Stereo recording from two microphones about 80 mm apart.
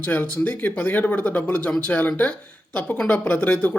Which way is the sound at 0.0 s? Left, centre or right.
Centre.